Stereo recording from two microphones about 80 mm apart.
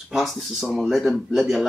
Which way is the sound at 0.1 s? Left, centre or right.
Centre.